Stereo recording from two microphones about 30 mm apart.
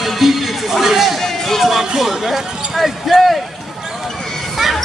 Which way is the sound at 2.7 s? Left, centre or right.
Centre.